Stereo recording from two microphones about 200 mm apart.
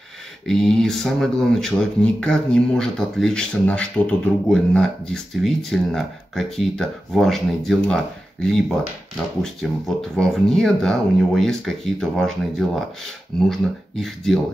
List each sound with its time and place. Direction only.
0.5 s speech: centre (ahead or behind)